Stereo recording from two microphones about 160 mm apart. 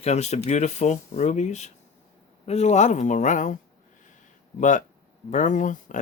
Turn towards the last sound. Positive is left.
turn(degrees=55)  # may be behind; listen again after turning